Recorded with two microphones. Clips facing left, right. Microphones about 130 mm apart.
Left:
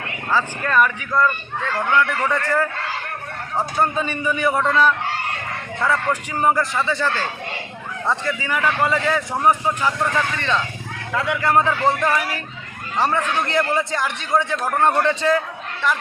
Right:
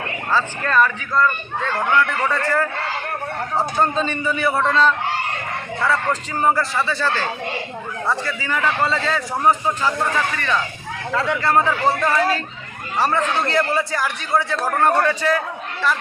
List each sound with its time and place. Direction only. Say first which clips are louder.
0.3 s speech: even; 10° left (ahead or behind)
2.3 s speech: even; 15° left (ahead or behind)
8.1 s a man's voice: left 1 dB; 20° left (ahead or behind)